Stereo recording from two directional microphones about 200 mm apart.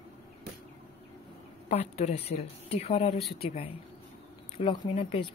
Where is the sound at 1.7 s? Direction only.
30° left (ahead or behind).